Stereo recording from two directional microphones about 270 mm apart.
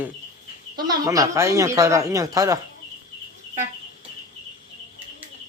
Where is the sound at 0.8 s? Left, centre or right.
Centre.